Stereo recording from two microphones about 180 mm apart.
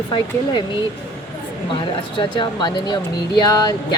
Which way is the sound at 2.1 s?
25° left (ahead or behind).